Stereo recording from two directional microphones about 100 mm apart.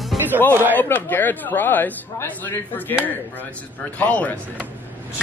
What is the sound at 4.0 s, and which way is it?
Speech, 15° left (ahead or behind).